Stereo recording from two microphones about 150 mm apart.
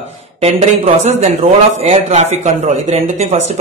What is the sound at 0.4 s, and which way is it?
Speech, 45° right (ahead or behind).